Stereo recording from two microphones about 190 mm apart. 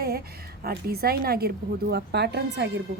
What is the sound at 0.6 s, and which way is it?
A woman's voice, 55° right (ahead or behind).